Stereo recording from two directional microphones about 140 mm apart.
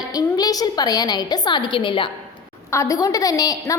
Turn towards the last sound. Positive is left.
turn(degrees=25)  # may be behind; listen again after turning